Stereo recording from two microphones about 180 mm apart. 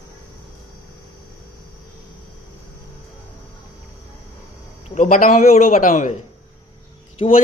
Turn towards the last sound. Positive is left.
turn(degrees=35)  # may be behind; listen again after turning